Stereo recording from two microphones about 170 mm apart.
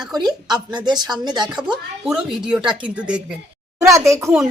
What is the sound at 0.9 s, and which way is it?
Speech, 25° right (ahead or behind).